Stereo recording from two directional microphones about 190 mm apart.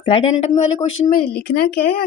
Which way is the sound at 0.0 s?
30° left (ahead or behind).